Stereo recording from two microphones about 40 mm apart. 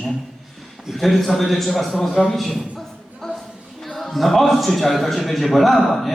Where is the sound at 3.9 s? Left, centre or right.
Centre.